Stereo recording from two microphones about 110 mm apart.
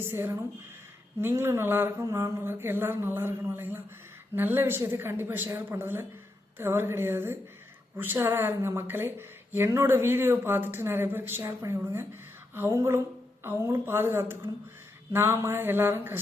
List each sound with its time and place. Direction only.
0.0 s speech: 20° right (ahead or behind)